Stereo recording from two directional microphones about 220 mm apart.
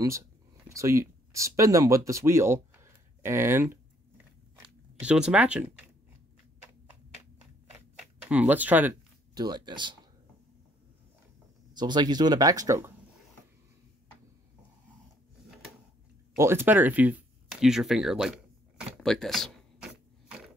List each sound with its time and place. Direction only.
0.7 s speech: 15° right (ahead or behind)
5.0 s speech: 5° right (ahead or behind)
8.0 s a sound: 5° right (ahead or behind)
9.4 s speech: 20° right (ahead or behind)
11.7 s speech: 20° right (ahead or behind)
16.3 s speech: 10° right (ahead or behind)
19.0 s a sound: centre (ahead or behind)